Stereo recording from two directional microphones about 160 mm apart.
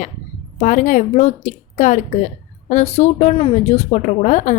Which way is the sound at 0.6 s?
50° left (ahead or behind).